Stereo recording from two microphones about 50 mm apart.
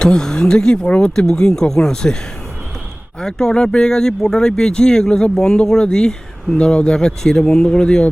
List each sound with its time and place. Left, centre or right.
0.0 s speech: centre
3.2 s speech: centre